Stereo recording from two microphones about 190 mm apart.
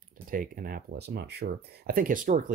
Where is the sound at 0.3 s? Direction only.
45° right (ahead or behind).